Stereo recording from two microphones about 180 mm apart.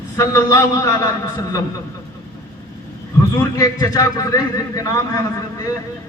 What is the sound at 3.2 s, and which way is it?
A man's voice, 20° left (ahead or behind).